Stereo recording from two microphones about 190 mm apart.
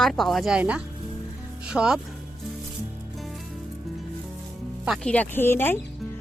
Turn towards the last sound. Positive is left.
turn(degrees=10)  # may be behind; listen again after turning